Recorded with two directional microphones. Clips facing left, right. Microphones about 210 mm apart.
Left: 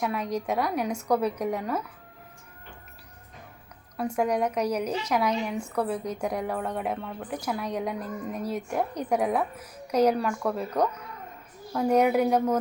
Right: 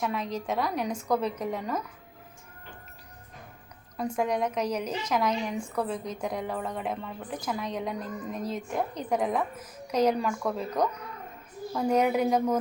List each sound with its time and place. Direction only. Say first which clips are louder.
0.0 s a woman's voice: left 2 dB; 10° left (ahead or behind)
3.9 s a woman's voice: left 2 dB; 10° left (ahead or behind)